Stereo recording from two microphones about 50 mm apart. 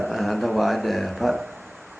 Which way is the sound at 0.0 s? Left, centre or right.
Centre.